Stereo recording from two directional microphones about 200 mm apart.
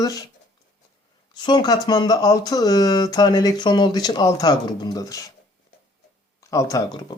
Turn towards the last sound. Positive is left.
turn(degrees=15)  # may be behind; listen again after turning